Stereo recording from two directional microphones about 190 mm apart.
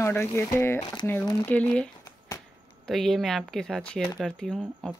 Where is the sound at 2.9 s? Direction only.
Centre (ahead or behind).